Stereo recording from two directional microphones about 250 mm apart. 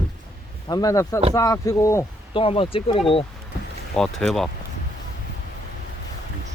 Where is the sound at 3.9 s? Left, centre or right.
Centre.